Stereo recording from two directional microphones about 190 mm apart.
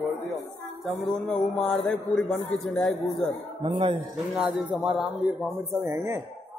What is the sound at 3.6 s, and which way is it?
Music, 25° right (ahead or behind).